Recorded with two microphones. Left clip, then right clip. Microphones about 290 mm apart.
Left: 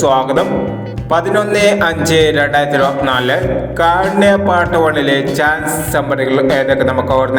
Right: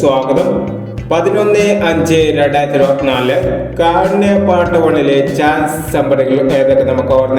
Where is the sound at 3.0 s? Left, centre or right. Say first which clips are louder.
Right 1 dB; left.